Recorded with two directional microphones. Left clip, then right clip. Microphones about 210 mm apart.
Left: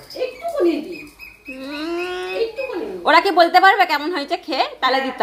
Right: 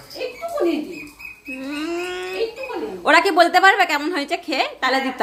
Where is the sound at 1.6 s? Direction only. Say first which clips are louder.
Left 1 dB; 15° right (ahead or behind).